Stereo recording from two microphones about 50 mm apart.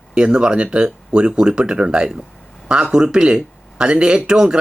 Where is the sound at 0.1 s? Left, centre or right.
Centre.